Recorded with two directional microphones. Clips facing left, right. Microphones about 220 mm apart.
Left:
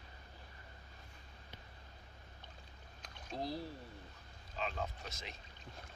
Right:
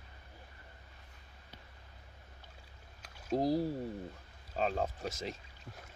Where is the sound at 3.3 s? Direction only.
40° right (ahead or behind).